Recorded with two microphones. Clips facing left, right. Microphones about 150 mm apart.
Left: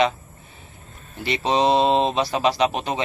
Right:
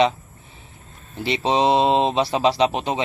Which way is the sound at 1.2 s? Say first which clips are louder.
Right 1 dB; 20° right (ahead or behind).